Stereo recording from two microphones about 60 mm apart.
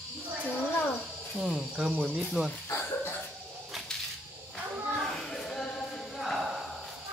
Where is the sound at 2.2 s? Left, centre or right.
Centre.